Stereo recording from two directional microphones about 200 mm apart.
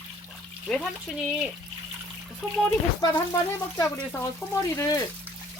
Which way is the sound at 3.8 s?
10° left (ahead or behind).